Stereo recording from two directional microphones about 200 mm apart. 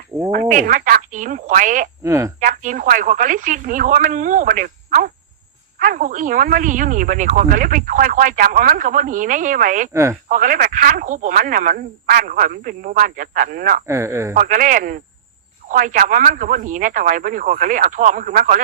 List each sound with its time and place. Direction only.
0.3 s speech: 40° right (ahead or behind)
2.0 s speech: 15° right (ahead or behind)
2.4 s speech: 40° right (ahead or behind)
9.9 s speech: 15° right (ahead or behind)
10.2 s speech: 40° right (ahead or behind)
13.8 s speech: 15° right (ahead or behind)
14.3 s speech: 40° right (ahead or behind)